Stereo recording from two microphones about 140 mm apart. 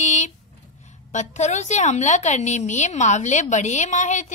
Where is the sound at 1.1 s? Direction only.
55° left (ahead or behind).